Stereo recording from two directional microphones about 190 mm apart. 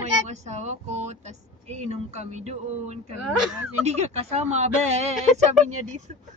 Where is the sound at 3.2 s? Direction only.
Centre (ahead or behind).